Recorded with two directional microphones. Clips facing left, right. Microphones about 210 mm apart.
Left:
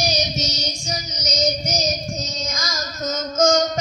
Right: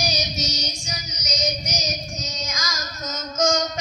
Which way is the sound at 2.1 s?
30° left (ahead or behind).